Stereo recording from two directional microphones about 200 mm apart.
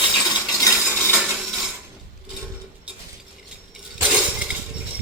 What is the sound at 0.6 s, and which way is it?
Stir, 10° left (ahead or behind).